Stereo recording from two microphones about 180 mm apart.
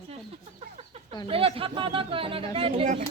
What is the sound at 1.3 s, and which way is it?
Speech, 30° right (ahead or behind).